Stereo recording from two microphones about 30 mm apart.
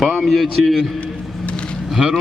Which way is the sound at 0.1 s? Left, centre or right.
Centre.